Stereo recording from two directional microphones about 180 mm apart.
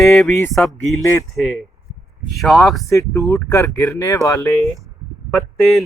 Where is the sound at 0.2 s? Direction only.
15° left (ahead or behind).